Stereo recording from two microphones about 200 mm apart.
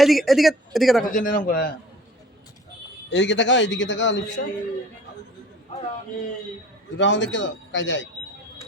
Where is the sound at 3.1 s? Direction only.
60° left (ahead or behind).